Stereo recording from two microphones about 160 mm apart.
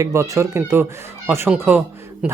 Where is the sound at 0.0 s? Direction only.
20° right (ahead or behind).